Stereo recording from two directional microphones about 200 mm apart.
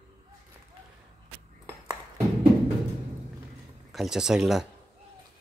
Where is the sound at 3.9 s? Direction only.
5° right (ahead or behind).